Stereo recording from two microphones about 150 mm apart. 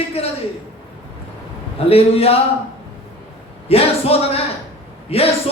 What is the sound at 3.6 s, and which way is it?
A man's voice, 40° left (ahead or behind).